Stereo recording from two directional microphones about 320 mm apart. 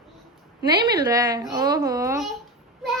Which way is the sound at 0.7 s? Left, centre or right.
Centre.